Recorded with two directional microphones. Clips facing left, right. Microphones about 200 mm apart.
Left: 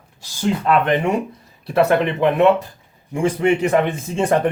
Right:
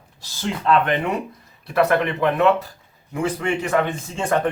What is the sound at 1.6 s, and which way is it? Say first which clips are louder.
Speech: left 3 dB; 25° left (ahead or behind).